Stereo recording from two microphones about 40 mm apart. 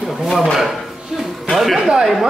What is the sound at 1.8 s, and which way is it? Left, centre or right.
Speech, centre.